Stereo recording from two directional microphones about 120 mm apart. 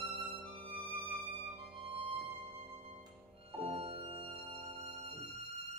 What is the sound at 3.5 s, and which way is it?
Music, 50° right (ahead or behind).